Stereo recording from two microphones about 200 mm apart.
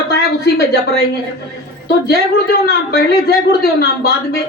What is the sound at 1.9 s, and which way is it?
Speech, 55° left (ahead or behind).